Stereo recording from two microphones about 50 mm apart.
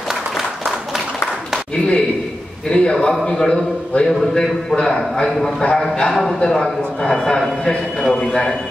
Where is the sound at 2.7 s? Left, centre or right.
Centre.